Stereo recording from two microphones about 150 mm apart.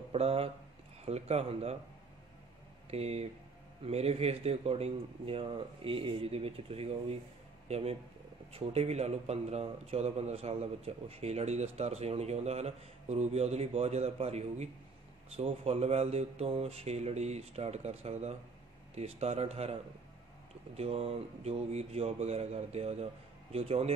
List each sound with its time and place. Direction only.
0.1 s a man's voice: 40° right (ahead or behind)
2.9 s a man's voice: 45° right (ahead or behind)